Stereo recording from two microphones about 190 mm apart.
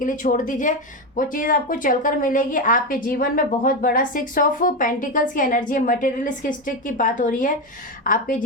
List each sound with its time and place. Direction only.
0.0 s speech: 45° left (ahead or behind)